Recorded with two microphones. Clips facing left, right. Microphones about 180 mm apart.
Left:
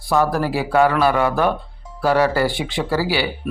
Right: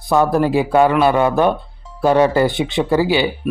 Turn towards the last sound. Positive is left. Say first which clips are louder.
# right 5 dB
turn(degrees=-20)  # may be behind; listen again after turning